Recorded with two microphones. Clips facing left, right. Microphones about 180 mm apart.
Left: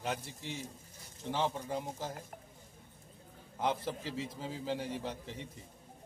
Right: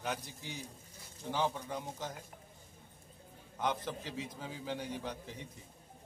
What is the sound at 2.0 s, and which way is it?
Speech, 30° left (ahead or behind).